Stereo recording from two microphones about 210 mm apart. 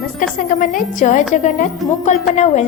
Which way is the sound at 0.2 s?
40° left (ahead or behind).